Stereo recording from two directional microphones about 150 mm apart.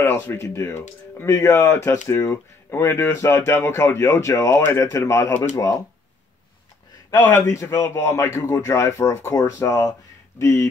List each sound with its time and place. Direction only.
0.0 s speech: 15° left (ahead or behind)
7.1 s speech: 20° left (ahead or behind)